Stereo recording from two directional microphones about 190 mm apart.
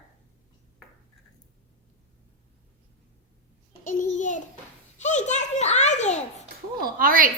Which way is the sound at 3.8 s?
45° left (ahead or behind).